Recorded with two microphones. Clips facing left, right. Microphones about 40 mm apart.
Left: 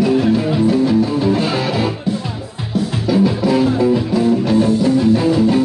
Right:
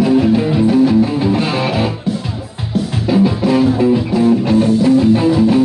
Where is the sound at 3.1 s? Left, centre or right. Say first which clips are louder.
Right 2 dB; right.